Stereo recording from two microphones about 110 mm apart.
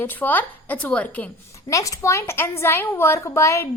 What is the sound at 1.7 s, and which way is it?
A woman's voice, 30° left (ahead or behind).